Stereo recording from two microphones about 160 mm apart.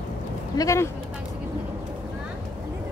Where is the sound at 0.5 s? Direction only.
20° left (ahead or behind).